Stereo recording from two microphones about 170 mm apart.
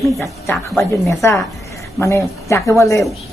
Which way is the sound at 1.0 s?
20° left (ahead or behind).